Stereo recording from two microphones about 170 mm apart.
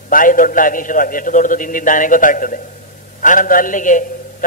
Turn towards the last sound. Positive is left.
turn(degrees=50)  # may be behind; listen again after turning